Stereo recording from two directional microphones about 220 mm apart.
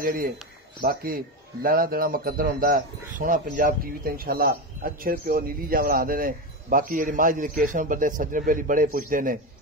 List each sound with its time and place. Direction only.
0.0 s speech: 40° right (ahead or behind)